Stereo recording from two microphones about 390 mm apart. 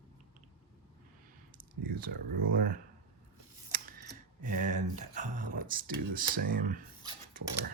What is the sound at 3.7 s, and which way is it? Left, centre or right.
Camera, right.